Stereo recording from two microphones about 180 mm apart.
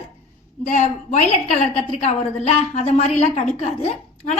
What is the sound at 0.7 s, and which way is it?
A woman's voice, 40° left (ahead or behind).